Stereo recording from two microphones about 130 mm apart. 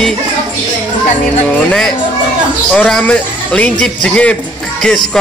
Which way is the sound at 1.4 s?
5° left (ahead or behind).